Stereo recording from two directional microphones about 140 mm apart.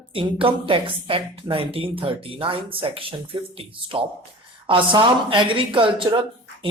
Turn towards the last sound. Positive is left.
turn(degrees=-35)  # may be behind; listen again after turning